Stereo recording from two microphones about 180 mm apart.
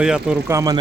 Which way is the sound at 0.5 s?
20° right (ahead or behind).